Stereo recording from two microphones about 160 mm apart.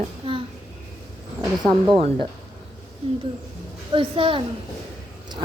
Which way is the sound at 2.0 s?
35° right (ahead or behind).